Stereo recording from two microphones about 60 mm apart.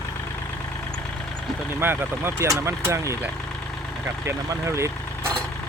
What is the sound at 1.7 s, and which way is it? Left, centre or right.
Speech, right.